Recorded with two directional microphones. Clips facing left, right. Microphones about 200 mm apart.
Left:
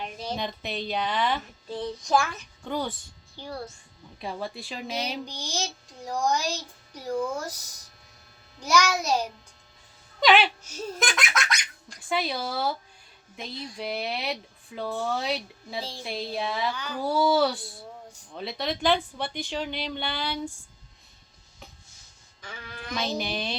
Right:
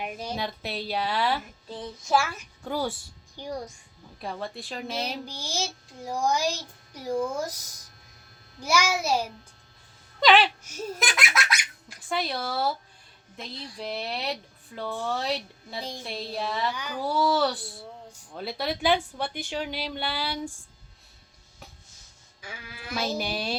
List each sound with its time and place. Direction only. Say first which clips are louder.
0.0 s speech: even; 10° right (ahead or behind)
4.2 s speech: left 1 dB; centre (ahead or behind)
8.6 s speech: left 1 dB; 10° right (ahead or behind)
10.2 s whimper: even; centre (ahead or behind)
10.6 s speech: left 1 dB; 10° right (ahead or behind)
16.7 s speech: even; 10° right (ahead or behind)
17.0 s speech: left 2 dB; centre (ahead or behind)
22.4 s speech: left 2 dB; 10° right (ahead or behind)